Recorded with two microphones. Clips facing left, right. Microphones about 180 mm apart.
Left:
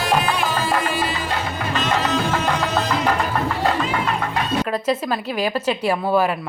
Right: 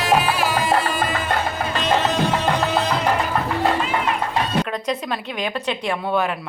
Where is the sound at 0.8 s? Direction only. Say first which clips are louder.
Right 1 dB; 50° right (ahead or behind).